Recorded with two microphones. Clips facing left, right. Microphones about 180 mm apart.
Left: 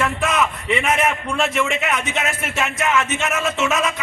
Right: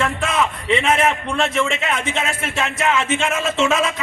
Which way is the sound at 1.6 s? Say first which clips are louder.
Even; 30° right (ahead or behind).